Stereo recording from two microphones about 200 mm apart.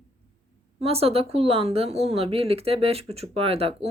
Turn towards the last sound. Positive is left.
turn(degrees=-30)  # may be behind; listen again after turning